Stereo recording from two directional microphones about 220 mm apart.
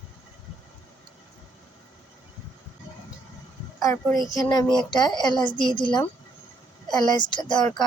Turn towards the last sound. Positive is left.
turn(degrees=20)  # may be behind; listen again after turning